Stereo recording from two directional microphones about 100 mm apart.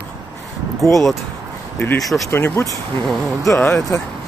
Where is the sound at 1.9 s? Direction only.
Centre (ahead or behind).